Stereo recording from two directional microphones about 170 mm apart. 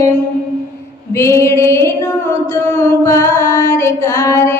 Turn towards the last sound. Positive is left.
turn(degrees=15)  # may be behind; listen again after turning